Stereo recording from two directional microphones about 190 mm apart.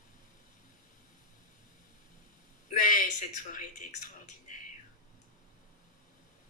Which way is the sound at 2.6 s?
45° left (ahead or behind).